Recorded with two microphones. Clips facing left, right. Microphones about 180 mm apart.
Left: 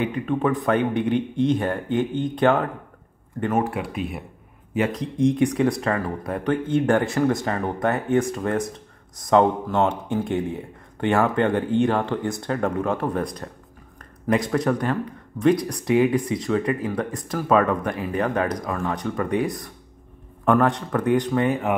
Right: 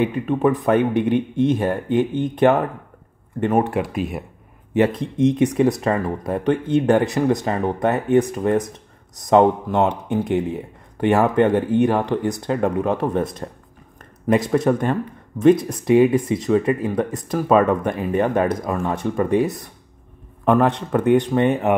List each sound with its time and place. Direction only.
0.0 s speech: 20° right (ahead or behind)
4.7 s speech: 30° right (ahead or behind)